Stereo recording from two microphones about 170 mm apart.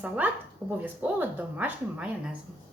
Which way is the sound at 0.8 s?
10° right (ahead or behind).